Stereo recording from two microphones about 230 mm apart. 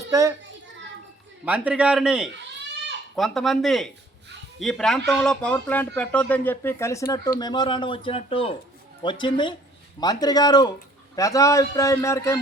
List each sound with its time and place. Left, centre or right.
0.1 s a child's voice: centre
1.5 s a man's voice: centre